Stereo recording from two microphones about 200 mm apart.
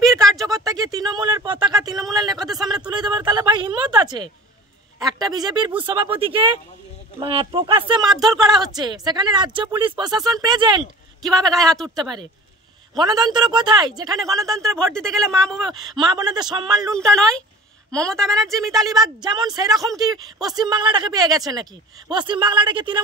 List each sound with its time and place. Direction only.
0.0 s a sound: centre (ahead or behind)
0.5 s a sound: 15° right (ahead or behind)
4.9 s a man's voice: 20° right (ahead or behind)
11.2 s a woman's voice: centre (ahead or behind)
11.9 s speech: 20° right (ahead or behind)
14.9 s a woman's voice: 5° left (ahead or behind)
15.7 s speech: 20° right (ahead or behind)
16.9 s a woman's voice: 5° left (ahead or behind)
19.2 s speech: 20° right (ahead or behind)